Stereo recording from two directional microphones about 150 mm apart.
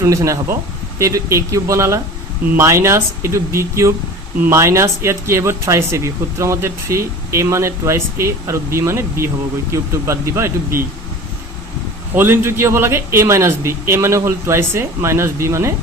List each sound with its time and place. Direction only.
0.0 s a man's voice: 20° right (ahead or behind)
12.1 s a man's voice: 15° right (ahead or behind)